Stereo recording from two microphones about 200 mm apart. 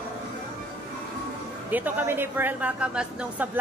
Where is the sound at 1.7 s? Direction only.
10° right (ahead or behind).